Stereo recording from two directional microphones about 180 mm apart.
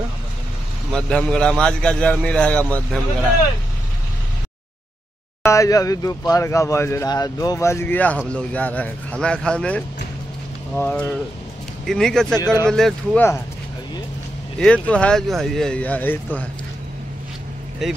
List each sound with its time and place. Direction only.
0.9 s a man's voice: 5° left (ahead or behind)
5.4 s a man's voice: 15° left (ahead or behind)
14.6 s a man's voice: 5° left (ahead or behind)
17.8 s a man's voice: centre (ahead or behind)